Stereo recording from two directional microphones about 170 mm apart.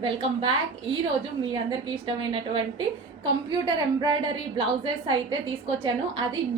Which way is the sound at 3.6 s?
25° right (ahead or behind).